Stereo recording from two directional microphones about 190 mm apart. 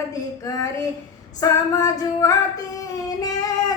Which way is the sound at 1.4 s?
15° left (ahead or behind).